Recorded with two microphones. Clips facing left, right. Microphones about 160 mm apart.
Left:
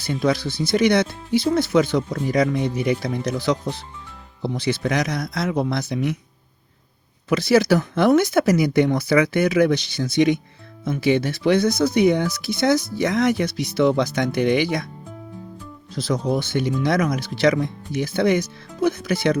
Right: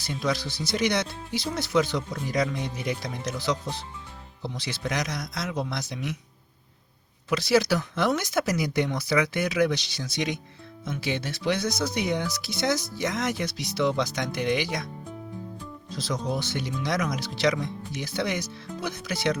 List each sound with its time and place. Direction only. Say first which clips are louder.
0.0 s speech: left 7 dB; 55° left (ahead or behind)
7.3 s speech: left 6 dB; 55° left (ahead or behind)
16.0 s speech: left 7 dB; 55° left (ahead or behind)